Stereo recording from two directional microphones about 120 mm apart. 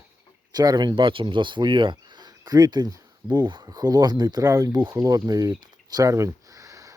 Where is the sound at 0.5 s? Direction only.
35° right (ahead or behind).